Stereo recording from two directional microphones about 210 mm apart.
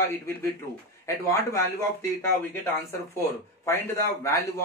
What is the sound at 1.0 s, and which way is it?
A man's voice, 15° left (ahead or behind).